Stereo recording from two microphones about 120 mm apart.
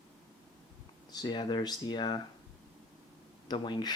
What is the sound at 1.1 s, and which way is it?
Speech, 35° left (ahead or behind).